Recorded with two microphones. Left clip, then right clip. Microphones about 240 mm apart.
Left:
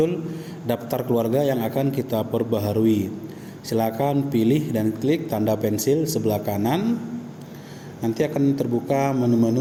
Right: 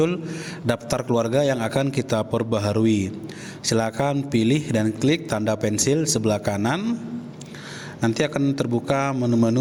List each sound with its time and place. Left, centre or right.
0.7 s a man's voice: right
8.0 s a man's voice: right